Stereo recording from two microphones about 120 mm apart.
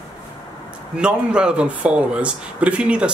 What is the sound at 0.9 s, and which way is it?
Speech, 10° right (ahead or behind).